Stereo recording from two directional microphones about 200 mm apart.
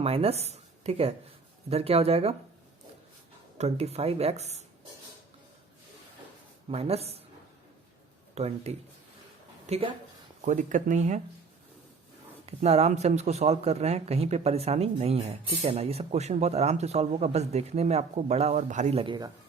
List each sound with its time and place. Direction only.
0.0 s speech: 30° right (ahead or behind)
3.6 s speech: 30° right (ahead or behind)
6.7 s speech: 30° right (ahead or behind)
8.4 s a woman's voice: 30° right (ahead or behind)
12.5 s speech: 30° right (ahead or behind)